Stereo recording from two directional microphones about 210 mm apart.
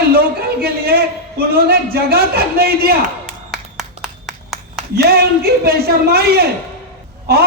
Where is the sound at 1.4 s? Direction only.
45° right (ahead or behind).